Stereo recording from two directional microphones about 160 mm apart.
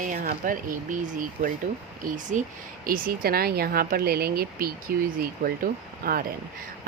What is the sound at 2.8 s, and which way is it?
Speech, 65° right (ahead or behind).